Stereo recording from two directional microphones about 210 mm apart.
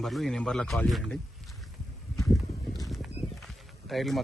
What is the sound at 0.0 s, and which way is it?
Speech, centre (ahead or behind).